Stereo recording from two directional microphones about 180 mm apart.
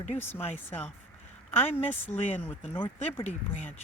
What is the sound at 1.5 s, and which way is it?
Speech, 10° left (ahead or behind).